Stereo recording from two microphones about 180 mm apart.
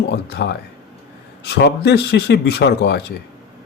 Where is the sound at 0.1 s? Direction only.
70° left (ahead or behind).